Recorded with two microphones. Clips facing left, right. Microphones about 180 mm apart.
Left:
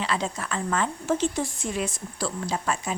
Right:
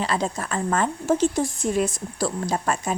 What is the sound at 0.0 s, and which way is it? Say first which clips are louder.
A woman's voice: right 3 dB; 40° right (ahead or behind).